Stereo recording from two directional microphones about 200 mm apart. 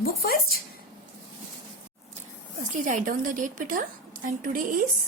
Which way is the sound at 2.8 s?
40° right (ahead or behind).